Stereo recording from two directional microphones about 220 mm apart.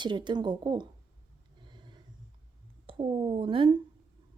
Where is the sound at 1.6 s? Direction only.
20° right (ahead or behind).